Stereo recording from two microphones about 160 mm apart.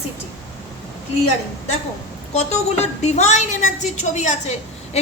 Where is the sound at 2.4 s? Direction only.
45° left (ahead or behind).